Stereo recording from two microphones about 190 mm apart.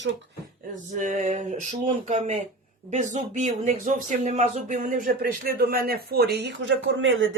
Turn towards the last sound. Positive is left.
turn(degrees=-90)